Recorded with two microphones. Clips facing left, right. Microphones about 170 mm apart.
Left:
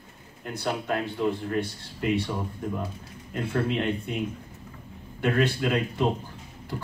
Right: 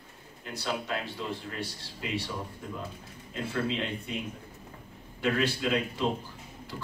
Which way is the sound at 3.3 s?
55° left (ahead or behind).